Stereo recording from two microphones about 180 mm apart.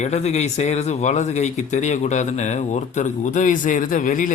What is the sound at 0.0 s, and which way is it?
Speech, 40° left (ahead or behind).